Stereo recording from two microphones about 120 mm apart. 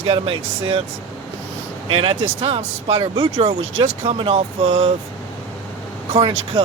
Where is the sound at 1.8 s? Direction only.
50° right (ahead or behind).